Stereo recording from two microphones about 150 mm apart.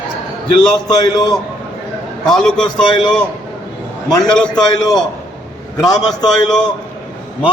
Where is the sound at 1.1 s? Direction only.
25° left (ahead or behind).